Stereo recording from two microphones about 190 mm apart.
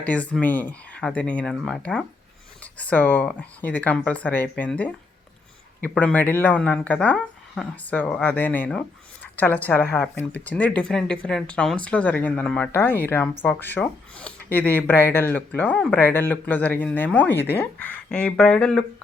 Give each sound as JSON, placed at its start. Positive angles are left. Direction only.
{"t": 0.0, "sound": "speech", "side_deg": 5}